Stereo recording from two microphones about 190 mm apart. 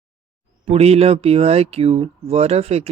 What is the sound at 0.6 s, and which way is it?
Speech, 35° right (ahead or behind).